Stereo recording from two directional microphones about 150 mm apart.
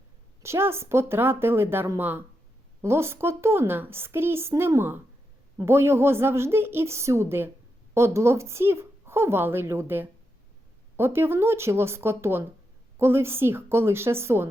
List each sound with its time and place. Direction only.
0.4 s a woman's voice: 15° right (ahead or behind)